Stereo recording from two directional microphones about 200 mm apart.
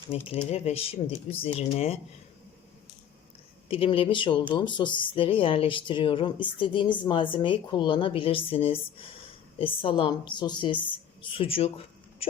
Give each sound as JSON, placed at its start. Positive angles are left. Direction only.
{"t": 0.1, "sound": "speech", "side_deg": 30}
{"t": 3.7, "sound": "speech", "side_deg": 25}
{"t": 12.2, "sound": "hiccup", "side_deg": 30}